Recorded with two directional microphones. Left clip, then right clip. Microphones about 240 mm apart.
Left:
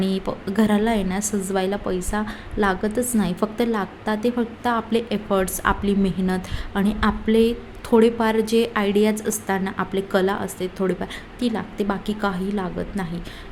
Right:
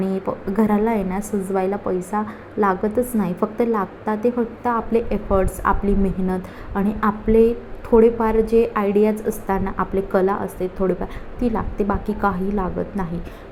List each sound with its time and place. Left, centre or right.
0.0 s a woman's voice: left